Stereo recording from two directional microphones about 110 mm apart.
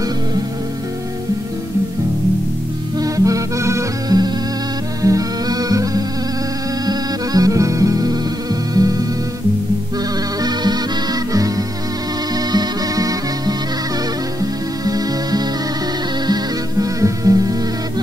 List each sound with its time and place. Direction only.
3.0 s music: 30° right (ahead or behind)
10.4 s music: 40° right (ahead or behind)